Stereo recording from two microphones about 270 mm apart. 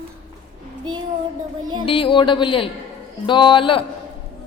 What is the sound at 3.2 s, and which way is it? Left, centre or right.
Speech, centre.